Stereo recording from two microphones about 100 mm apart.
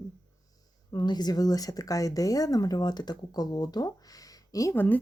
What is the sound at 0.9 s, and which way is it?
Speech, 45° left (ahead or behind).